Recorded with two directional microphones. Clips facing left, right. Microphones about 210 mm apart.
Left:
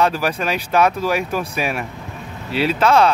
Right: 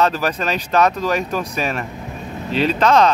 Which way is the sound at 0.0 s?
10° left (ahead or behind).